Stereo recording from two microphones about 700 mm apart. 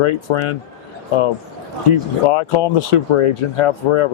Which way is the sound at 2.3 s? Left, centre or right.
Left.